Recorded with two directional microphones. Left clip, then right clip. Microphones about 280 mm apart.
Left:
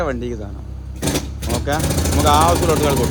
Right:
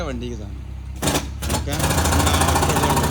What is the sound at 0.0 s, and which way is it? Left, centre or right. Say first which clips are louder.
Speech: left 7 dB; centre.